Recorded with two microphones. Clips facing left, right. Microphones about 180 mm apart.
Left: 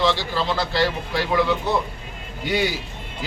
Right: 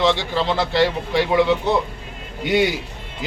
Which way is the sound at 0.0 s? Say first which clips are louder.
Right 3 dB; 20° right (ahead or behind).